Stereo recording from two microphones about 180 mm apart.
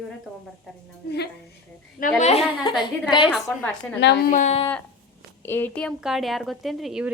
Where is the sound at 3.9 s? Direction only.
70° left (ahead or behind).